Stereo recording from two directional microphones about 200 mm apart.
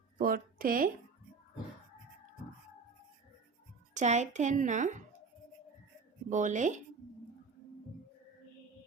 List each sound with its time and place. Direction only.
0.2 s a sound: 45° right (ahead or behind)
3.9 s a woman's voice: 35° right (ahead or behind)
6.3 s a woman's voice: 40° right (ahead or behind)